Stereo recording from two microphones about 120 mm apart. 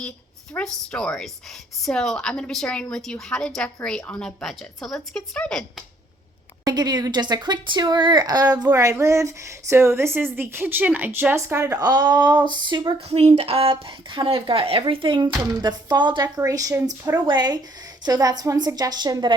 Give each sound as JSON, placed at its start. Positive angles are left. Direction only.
{"t": 0.5, "sound": "a woman's voice", "side_deg": 10}
{"t": 6.7, "sound": "a woman's voice", "side_deg": -35}
{"t": 13.1, "sound": "a woman's voice", "side_deg": -60}